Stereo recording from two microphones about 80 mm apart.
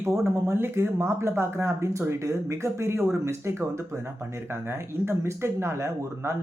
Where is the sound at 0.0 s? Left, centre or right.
Right.